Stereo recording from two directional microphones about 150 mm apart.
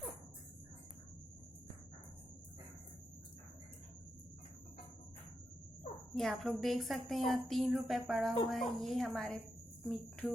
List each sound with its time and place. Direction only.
6.1 s a woman's voice: centre (ahead or behind)